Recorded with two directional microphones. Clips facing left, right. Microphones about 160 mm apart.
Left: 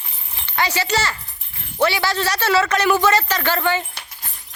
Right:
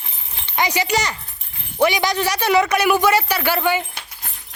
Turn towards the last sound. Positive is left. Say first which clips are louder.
# right 1 dB
turn(degrees=-15)  # may be behind; listen again after turning